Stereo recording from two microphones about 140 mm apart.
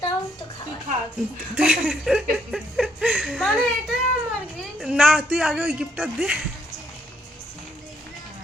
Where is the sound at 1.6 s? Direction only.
5° right (ahead or behind).